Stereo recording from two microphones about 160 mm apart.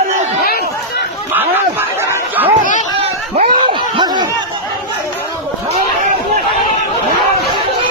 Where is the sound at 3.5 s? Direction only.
30° right (ahead or behind).